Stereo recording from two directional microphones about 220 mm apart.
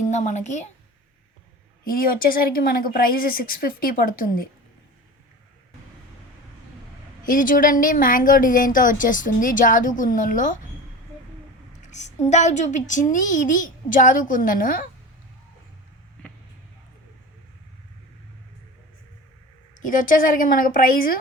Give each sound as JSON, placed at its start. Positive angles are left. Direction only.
{"t": 0.1, "sound": "a woman's voice", "side_deg": 30}
{"t": 1.8, "sound": "a woman's voice", "side_deg": 40}
{"t": 7.3, "sound": "a woman's voice", "side_deg": 40}
{"t": 11.8, "sound": "a woman's voice", "side_deg": 30}
{"t": 19.8, "sound": "a woman's voice", "side_deg": 35}